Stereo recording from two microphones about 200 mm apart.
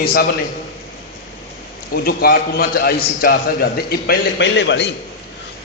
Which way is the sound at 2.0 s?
50° left (ahead or behind).